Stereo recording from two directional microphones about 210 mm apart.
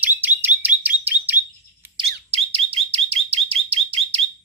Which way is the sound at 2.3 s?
25° right (ahead or behind).